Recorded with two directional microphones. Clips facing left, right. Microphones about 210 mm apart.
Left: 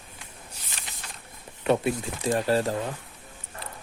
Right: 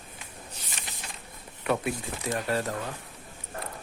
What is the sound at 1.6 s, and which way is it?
Speech, 25° left (ahead or behind).